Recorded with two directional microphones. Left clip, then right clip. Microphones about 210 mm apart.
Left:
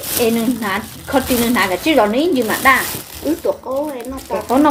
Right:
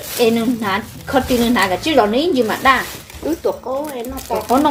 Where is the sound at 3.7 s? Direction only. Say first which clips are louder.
Left 1 dB; 20° right (ahead or behind).